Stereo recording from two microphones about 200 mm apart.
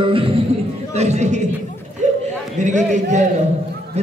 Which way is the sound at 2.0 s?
35° right (ahead or behind).